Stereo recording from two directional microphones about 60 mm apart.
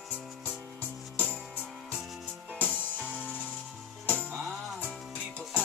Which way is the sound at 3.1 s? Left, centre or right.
Right.